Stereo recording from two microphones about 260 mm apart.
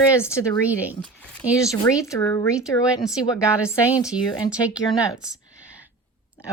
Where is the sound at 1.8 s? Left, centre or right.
Centre.